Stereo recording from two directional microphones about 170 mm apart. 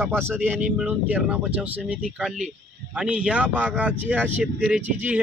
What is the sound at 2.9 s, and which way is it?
Speech, 5° right (ahead or behind).